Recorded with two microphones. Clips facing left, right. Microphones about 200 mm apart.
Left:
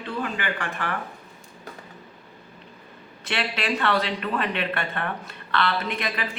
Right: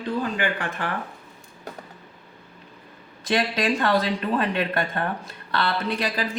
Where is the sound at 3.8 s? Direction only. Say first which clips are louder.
Right 2 dB; 35° right (ahead or behind).